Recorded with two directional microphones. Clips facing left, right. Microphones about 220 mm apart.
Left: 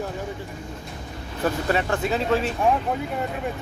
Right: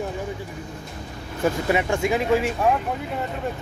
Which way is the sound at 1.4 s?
15° right (ahead or behind).